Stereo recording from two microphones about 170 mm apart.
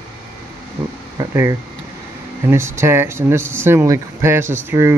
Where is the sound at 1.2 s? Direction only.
20° right (ahead or behind).